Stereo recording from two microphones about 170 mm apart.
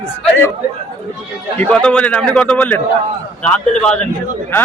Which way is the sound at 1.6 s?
5° left (ahead or behind).